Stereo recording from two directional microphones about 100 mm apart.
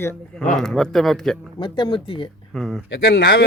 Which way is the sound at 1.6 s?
55° left (ahead or behind).